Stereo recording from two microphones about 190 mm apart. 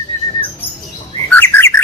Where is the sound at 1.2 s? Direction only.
10° left (ahead or behind).